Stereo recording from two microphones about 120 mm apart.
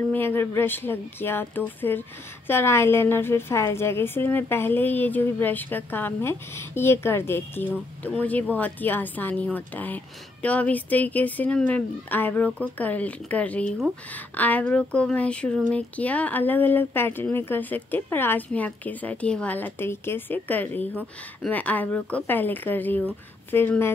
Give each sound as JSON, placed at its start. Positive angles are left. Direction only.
{"t": 0.1, "sound": "a woman's voice", "side_deg": 20}